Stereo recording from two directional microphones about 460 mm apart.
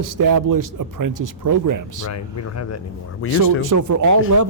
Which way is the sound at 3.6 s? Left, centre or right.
Right.